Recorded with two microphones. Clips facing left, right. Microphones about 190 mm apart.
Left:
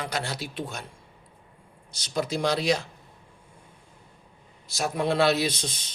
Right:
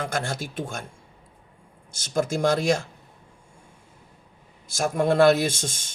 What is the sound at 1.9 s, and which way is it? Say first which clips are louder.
Speech: right 3 dB; 50° right (ahead or behind).